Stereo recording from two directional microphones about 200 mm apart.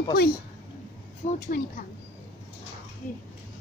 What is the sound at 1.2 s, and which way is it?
Speech, 35° left (ahead or behind).